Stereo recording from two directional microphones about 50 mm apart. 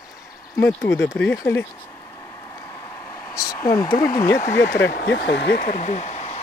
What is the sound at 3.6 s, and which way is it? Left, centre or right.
Speech, left.